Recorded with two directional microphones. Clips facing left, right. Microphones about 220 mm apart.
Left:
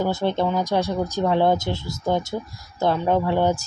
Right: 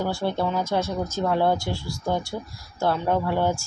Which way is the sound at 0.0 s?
20° left (ahead or behind).